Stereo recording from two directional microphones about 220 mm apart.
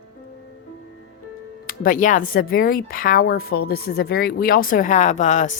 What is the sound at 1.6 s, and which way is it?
Speech, 40° left (ahead or behind).